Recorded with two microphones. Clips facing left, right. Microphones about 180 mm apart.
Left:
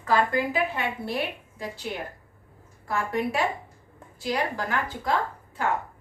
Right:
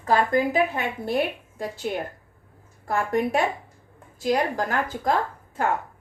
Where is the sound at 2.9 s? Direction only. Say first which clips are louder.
Right 4 dB; 50° right (ahead or behind).